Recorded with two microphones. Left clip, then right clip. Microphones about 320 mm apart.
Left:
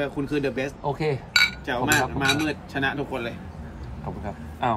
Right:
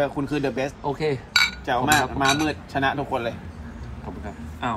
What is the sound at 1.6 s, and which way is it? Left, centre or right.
Speech, centre.